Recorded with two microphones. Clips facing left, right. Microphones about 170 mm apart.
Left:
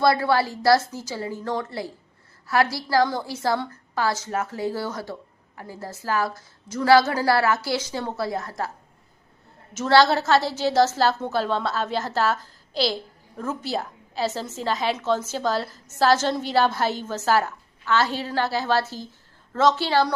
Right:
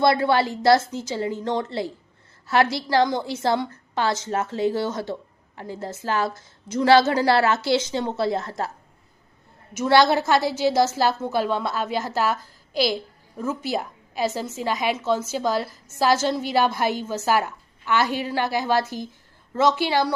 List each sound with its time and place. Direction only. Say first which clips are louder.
0.0 s a woman's voice: right 1 dB; 20° right (ahead or behind)
9.7 s a woman's voice: even; 15° right (ahead or behind)